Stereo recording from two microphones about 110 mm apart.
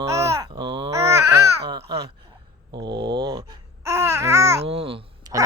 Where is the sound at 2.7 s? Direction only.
45° right (ahead or behind).